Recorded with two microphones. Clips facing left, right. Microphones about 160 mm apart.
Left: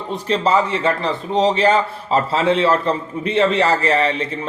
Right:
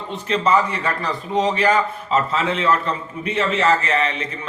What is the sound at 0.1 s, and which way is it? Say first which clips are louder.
A man's voice: left 1 dB; 30° left (ahead or behind).